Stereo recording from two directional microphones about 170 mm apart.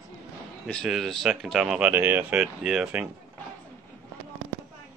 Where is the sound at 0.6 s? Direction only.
Centre (ahead or behind).